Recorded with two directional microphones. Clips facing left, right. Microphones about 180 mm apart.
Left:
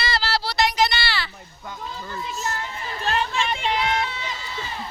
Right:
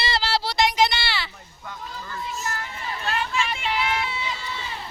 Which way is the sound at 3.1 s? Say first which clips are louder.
Left 3 dB; 35° left (ahead or behind).